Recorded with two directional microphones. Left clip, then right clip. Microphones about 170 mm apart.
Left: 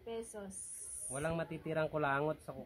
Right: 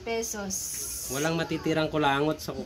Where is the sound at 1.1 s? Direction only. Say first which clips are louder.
Right 10 dB; 35° left (ahead or behind).